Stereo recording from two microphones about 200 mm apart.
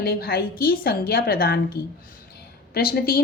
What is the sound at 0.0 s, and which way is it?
A woman's voice, 50° left (ahead or behind).